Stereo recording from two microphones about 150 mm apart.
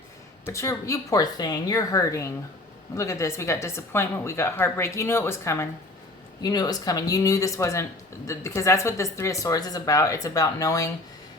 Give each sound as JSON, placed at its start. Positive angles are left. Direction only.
{"t": 0.4, "sound": "speech", "side_deg": 20}